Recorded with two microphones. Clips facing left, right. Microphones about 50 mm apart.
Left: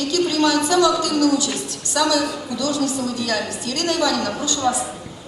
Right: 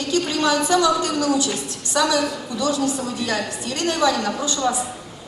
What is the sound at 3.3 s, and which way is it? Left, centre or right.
A woman's voice, right.